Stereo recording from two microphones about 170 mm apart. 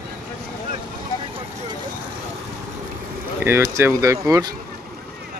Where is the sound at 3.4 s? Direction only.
15° right (ahead or behind).